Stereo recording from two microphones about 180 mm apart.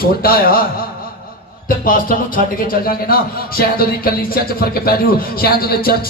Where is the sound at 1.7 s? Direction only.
50° left (ahead or behind).